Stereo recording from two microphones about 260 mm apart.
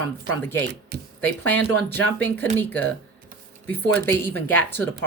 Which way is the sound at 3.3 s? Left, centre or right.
Right.